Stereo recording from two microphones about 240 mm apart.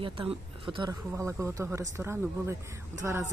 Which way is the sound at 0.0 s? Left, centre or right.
Right.